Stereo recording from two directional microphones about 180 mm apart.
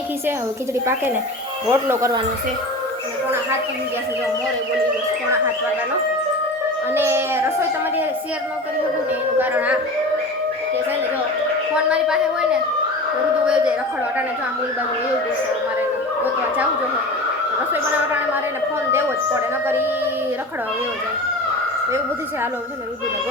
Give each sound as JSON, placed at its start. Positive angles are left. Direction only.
{"t": 1.7, "sound": "speech", "side_deg": -15}
{"t": 6.9, "sound": "speech", "side_deg": -15}
{"t": 9.4, "sound": "speech", "side_deg": -10}
{"t": 11.9, "sound": "speech", "side_deg": -5}
{"t": 13.4, "sound": "speech", "side_deg": -5}
{"t": 18.9, "sound": "speech", "side_deg": -15}